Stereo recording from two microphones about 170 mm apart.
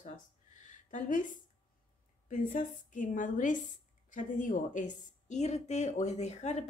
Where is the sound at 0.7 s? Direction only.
50° left (ahead or behind).